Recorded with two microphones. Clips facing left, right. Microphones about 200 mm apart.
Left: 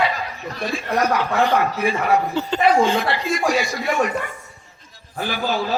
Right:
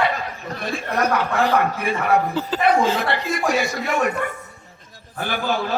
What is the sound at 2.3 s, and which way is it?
Speech, 5° right (ahead or behind).